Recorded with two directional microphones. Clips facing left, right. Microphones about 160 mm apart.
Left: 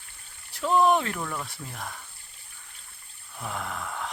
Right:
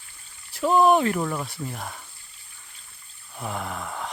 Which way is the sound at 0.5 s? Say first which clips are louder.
Right 3 dB; 5° right (ahead or behind).